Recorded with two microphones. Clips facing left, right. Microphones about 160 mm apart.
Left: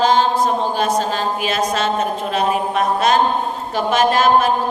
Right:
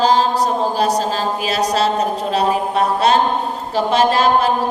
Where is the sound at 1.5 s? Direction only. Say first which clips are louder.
Right 3 dB; 35° right (ahead or behind).